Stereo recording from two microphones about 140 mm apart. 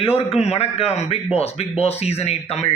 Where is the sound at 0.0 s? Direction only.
45° left (ahead or behind).